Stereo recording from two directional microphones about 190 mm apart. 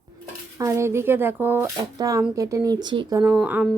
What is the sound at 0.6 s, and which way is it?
Speech, 15° right (ahead or behind).